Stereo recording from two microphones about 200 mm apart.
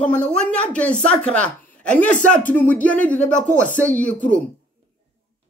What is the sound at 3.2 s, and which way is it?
Speech, 40° left (ahead or behind).